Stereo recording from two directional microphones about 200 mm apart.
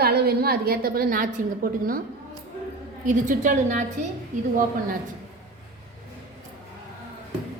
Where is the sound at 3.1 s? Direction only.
40° right (ahead or behind).